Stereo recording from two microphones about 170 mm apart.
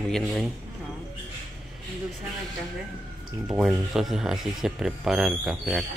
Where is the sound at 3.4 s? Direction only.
5° right (ahead or behind).